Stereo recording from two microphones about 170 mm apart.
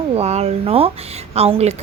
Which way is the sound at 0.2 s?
40° right (ahead or behind).